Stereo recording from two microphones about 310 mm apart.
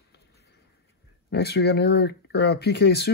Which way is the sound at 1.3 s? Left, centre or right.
Left.